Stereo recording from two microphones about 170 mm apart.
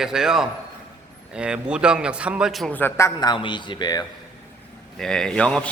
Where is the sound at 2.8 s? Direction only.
15° left (ahead or behind).